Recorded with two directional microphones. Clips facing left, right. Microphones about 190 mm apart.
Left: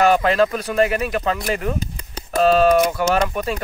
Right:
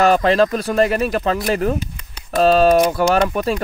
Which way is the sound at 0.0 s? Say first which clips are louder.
Right 2 dB; 30° right (ahead or behind).